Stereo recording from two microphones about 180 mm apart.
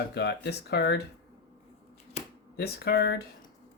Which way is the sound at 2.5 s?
60° left (ahead or behind).